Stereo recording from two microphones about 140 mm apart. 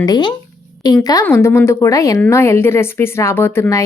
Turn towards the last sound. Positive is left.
turn(degrees=20)  # may be behind; listen again after turning